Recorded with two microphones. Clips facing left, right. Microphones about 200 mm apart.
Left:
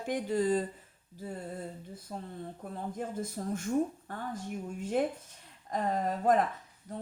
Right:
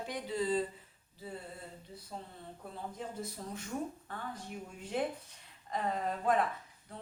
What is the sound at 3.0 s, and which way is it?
Speech, 50° left (ahead or behind).